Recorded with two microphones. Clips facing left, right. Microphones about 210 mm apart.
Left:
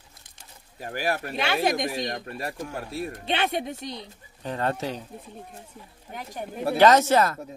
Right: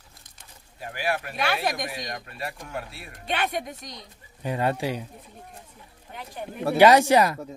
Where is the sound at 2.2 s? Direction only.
40° left (ahead or behind).